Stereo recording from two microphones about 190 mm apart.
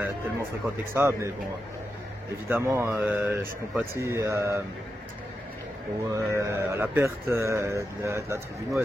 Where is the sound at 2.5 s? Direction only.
10° right (ahead or behind).